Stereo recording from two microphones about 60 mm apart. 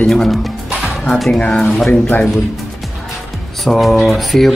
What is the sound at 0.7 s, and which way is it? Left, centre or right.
Music, centre.